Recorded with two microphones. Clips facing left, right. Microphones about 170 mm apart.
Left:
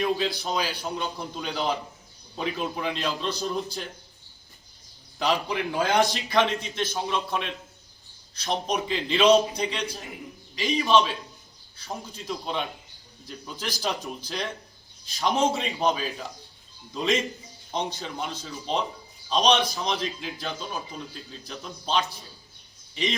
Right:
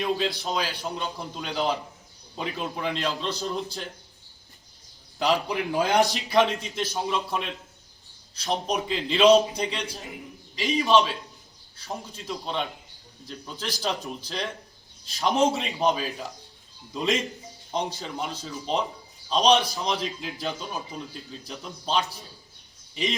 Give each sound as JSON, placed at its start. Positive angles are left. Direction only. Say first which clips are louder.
{"t": 0.0, "sound": "a man's voice", "louder": "left 1 dB", "side_deg": 0}
{"t": 5.2, "sound": "a man's voice", "louder": "right 1 dB", "side_deg": 0}